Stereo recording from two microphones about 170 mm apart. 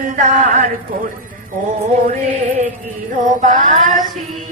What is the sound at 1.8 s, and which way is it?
Music, 45° right (ahead or behind).